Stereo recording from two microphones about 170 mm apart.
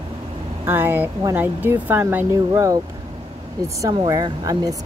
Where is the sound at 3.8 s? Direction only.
20° right (ahead or behind).